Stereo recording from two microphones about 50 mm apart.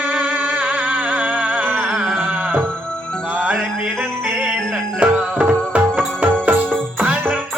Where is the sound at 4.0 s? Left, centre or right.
Centre.